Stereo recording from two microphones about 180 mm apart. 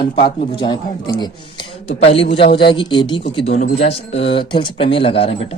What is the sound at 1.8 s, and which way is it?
Speech, 35° left (ahead or behind).